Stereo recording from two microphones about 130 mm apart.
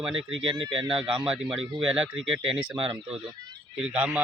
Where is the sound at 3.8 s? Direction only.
5° right (ahead or behind).